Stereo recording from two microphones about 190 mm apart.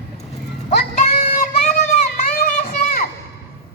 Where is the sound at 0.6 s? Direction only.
40° left (ahead or behind).